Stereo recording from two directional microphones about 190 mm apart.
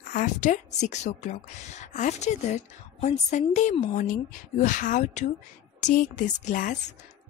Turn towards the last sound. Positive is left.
turn(degrees=45)  # may be behind; listen again after turning